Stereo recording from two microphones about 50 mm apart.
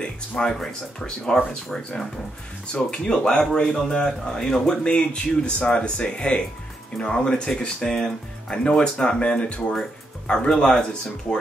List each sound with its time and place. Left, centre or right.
0.6 s speech: centre